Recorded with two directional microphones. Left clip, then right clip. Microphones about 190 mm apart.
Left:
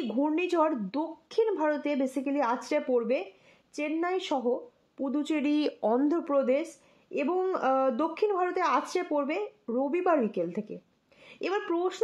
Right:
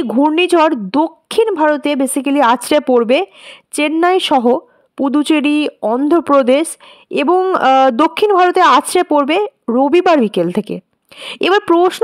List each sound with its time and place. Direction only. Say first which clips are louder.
0.0 s a woman's voice: right 16 dB; 50° right (ahead or behind)
5.5 s speech: right 12 dB; 30° right (ahead or behind)
6.0 s a woman's voice: right 16 dB; 45° right (ahead or behind)